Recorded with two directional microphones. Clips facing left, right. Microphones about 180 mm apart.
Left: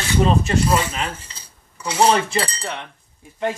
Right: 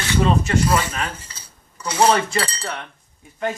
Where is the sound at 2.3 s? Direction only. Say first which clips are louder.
Left 1 dB; 25° left (ahead or behind).